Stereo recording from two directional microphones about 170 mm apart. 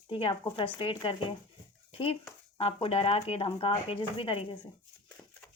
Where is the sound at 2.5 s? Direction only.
35° left (ahead or behind).